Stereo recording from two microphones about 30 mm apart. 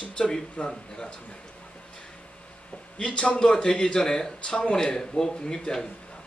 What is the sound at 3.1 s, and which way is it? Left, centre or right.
Speech, left.